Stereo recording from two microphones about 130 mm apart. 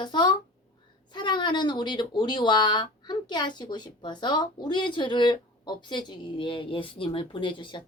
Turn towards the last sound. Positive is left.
turn(degrees=40)  # may be behind; listen again after turning